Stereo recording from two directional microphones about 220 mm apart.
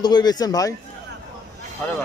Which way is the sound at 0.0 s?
20° left (ahead or behind).